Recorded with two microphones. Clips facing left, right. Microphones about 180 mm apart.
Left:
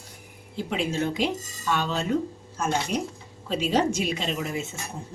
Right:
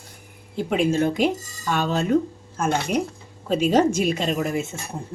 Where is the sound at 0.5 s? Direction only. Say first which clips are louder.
Right 6 dB; 50° right (ahead or behind).